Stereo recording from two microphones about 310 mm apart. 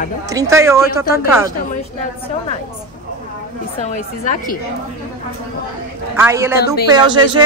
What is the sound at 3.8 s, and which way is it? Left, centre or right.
Speech, left.